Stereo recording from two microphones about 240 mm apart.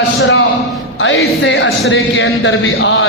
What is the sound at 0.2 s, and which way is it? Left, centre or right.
A man's voice, left.